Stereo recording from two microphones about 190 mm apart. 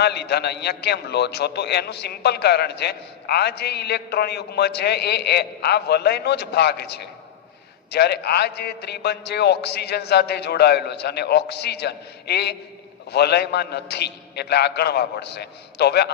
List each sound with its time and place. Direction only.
0.0 s a man's voice: 60° left (ahead or behind)